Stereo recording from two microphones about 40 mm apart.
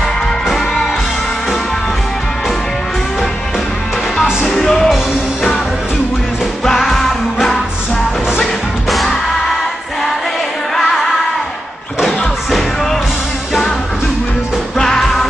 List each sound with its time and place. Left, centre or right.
4.5 s music: left
6.8 s music: centre
8.9 s music: centre
10.8 s music: centre